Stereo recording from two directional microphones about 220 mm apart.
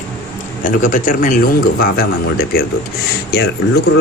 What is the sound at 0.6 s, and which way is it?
A man's voice, 35° left (ahead or behind).